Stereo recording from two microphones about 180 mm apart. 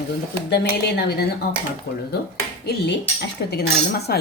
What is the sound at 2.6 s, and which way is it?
Speech, 65° left (ahead or behind).